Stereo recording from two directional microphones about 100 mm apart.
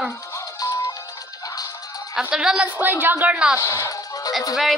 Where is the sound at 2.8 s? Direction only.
20° right (ahead or behind).